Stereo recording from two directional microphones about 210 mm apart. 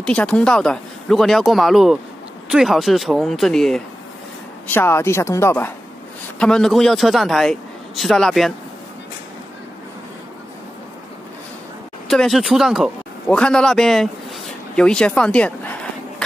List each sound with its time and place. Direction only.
0.0 s a man's voice: 5° left (ahead or behind)
12.1 s a man's voice: centre (ahead or behind)
14.8 s a sound: 5° left (ahead or behind)